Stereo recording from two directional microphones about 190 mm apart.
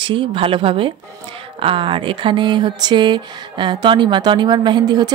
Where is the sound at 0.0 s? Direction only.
25° right (ahead or behind).